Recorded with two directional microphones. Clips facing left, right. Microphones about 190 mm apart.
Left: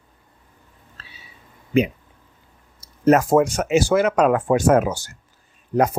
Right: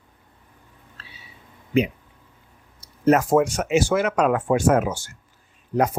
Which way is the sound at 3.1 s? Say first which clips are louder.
Left 2 dB; 40° left (ahead or behind).